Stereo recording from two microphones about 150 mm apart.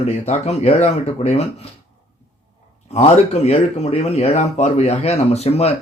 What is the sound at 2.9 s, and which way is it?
Speech, 45° left (ahead or behind).